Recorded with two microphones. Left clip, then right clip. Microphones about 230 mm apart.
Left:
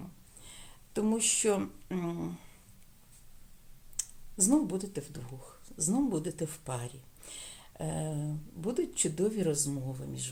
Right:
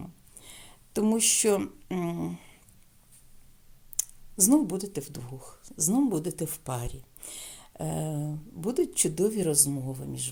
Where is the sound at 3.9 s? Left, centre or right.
Right.